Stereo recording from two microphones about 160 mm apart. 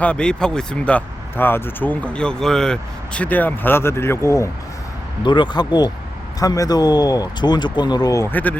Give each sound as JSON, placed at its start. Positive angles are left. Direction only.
{"t": 0.0, "sound": "speech", "side_deg": 5}
{"t": 5.2, "sound": "speech", "side_deg": 30}